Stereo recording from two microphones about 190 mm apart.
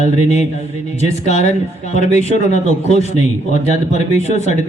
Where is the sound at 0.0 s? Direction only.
35° left (ahead or behind).